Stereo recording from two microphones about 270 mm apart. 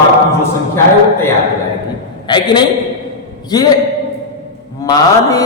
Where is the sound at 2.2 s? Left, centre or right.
Centre.